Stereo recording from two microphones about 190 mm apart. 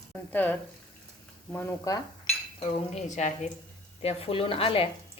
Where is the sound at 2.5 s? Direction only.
35° left (ahead or behind).